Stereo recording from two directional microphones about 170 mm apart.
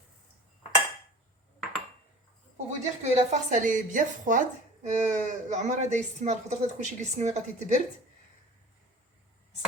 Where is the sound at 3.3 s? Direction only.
45° right (ahead or behind).